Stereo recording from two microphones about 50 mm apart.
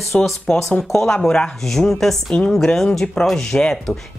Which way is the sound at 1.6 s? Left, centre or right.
Centre.